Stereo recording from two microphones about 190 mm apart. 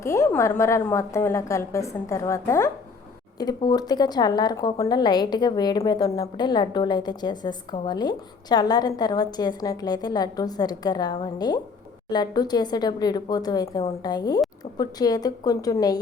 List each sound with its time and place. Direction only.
0.0 s a woman's voice: 15° left (ahead or behind)